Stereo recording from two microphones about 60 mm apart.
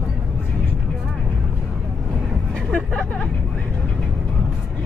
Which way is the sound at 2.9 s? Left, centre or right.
Centre.